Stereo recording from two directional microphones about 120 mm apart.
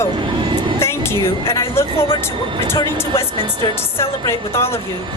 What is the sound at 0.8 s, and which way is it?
Music, 20° left (ahead or behind).